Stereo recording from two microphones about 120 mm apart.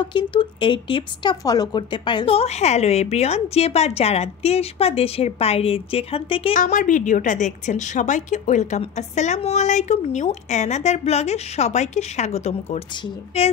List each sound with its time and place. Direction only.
0.0 s speech: 40° left (ahead or behind)
1.3 s a woman's voice: 30° left (ahead or behind); by 6.5 s 50° left (ahead or behind)
6.5 s a woman's voice: 90° left; by 12.8 s 65° left (ahead or behind)